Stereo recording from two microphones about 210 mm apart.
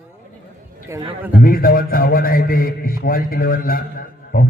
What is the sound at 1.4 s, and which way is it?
A man's voice, 45° left (ahead or behind).